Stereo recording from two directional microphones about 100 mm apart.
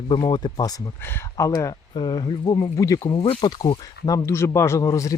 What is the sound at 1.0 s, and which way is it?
Speech, 25° left (ahead or behind).